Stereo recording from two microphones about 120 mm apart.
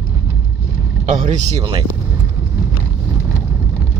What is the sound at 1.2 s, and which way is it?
Speech, 70° right (ahead or behind).